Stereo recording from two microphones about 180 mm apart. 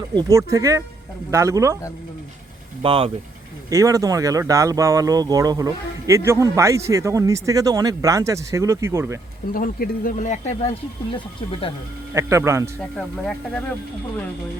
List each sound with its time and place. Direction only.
0.1 s speech: 20° right (ahead or behind)
2.8 s speech: 30° right (ahead or behind)
3.7 s speech: 20° right (ahead or behind)
9.5 s speech: 55° left (ahead or behind)
12.1 s speech: 15° right (ahead or behind)
13.0 s speech: 5° left (ahead or behind)